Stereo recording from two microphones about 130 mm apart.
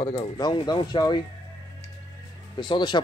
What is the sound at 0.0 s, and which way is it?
Speech, 45° left (ahead or behind).